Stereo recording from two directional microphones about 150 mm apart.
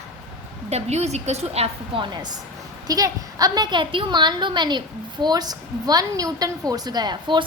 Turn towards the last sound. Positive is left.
turn(degrees=-30)  # may be behind; listen again after turning